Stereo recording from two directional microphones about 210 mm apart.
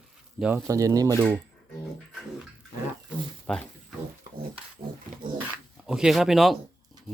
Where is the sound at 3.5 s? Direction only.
5° left (ahead or behind).